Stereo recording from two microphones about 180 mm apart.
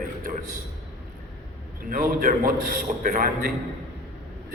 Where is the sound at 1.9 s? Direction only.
50° right (ahead or behind).